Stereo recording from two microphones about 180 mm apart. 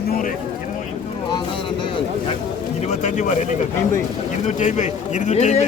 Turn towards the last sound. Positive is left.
turn(degrees=40)  # may be behind; listen again after turning